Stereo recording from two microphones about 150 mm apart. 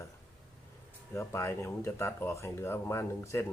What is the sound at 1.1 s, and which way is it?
Speech, 15° left (ahead or behind).